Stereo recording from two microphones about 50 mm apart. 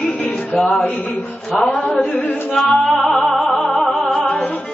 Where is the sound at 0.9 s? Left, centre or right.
Left.